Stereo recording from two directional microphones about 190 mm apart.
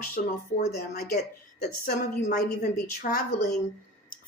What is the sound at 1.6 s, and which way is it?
Speech, 45° left (ahead or behind).